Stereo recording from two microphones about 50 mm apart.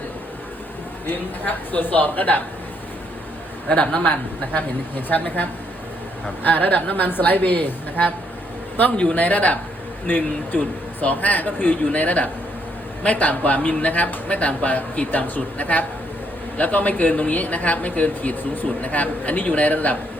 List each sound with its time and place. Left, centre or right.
1.0 s speech: left
3.8 s speech: left
9.1 s speech: left
11.9 s a man's voice: left